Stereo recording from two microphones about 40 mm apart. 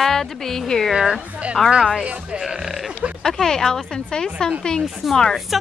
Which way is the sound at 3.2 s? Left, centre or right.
Centre.